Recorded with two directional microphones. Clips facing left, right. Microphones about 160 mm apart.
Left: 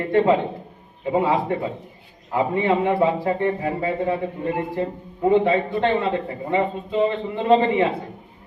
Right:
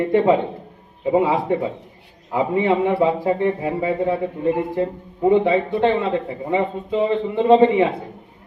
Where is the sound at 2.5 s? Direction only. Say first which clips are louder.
Right 3 dB; 15° right (ahead or behind).